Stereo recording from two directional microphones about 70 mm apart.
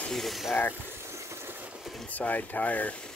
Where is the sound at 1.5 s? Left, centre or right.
Centre.